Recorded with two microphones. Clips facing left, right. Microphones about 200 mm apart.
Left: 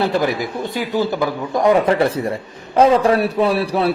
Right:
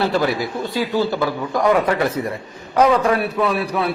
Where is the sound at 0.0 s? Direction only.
15° left (ahead or behind).